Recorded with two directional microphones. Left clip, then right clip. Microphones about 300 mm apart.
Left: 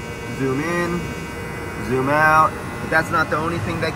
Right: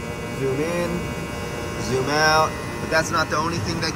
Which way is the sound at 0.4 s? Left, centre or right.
Centre.